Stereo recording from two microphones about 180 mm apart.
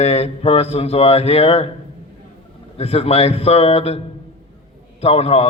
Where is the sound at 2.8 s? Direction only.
35° left (ahead or behind).